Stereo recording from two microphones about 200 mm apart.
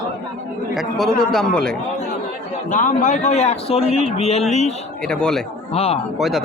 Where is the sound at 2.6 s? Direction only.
40° left (ahead or behind).